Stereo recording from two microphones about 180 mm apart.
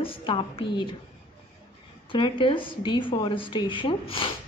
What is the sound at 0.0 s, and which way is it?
Speech, 30° left (ahead or behind).